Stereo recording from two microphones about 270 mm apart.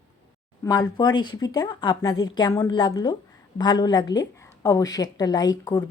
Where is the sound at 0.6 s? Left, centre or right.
Centre.